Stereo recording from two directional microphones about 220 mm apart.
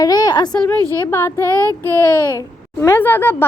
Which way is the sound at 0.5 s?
10° left (ahead or behind).